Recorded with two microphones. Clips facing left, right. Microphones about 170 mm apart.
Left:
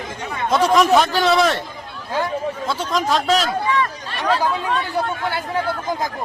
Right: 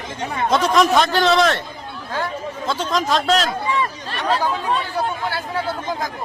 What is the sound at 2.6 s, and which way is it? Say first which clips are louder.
Speech: right 2 dB; 10° left (ahead or behind).